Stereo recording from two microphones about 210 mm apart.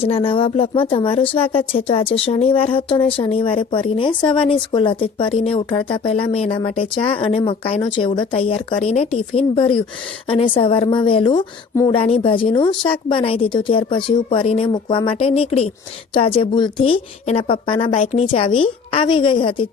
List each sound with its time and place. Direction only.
0.0 s speech: 25° left (ahead or behind)